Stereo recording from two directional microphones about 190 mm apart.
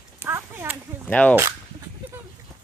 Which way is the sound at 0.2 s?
10° right (ahead or behind).